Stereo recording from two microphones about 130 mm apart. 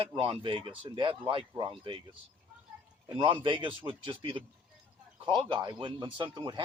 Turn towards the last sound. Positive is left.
turn(degrees=-40)  # may be behind; listen again after turning